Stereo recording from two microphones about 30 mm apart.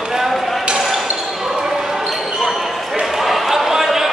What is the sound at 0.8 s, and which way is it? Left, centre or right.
Basketball bounce, centre.